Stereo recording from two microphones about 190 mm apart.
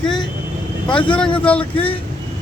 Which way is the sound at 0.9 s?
5° left (ahead or behind).